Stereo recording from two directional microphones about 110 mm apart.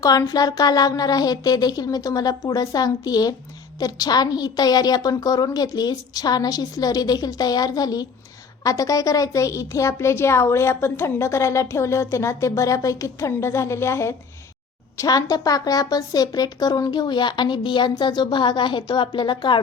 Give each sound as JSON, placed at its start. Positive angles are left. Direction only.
{"t": 0.0, "sound": "a woman's voice", "side_deg": 35}